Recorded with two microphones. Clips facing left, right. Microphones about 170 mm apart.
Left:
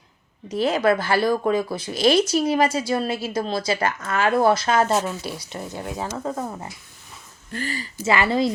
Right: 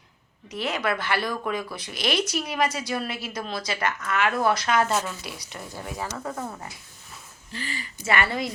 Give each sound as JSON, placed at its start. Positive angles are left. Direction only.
{"t": 0.4, "sound": "speech", "side_deg": 30}
{"t": 7.5, "sound": "speech", "side_deg": 45}
{"t": 8.0, "sound": "speech", "side_deg": 25}